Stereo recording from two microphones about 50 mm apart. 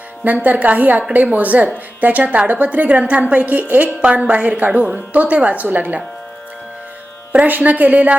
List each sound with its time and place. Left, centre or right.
0.3 s a woman's voice: right
7.4 s a woman's voice: right